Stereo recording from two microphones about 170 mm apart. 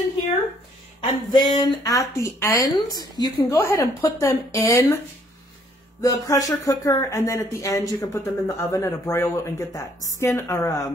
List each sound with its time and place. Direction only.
1.0 s speech: 25° left (ahead or behind)
5.9 s speech: 20° left (ahead or behind)